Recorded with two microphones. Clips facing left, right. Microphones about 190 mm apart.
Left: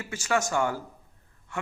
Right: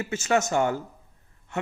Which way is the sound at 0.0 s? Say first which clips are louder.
Right 4 dB; 25° right (ahead or behind).